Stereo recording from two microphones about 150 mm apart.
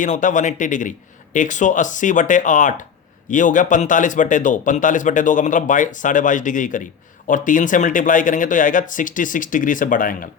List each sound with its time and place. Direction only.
0.0 s speech: 55° left (ahead or behind)